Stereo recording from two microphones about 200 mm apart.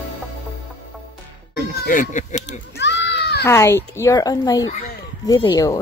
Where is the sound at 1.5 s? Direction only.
40° left (ahead or behind).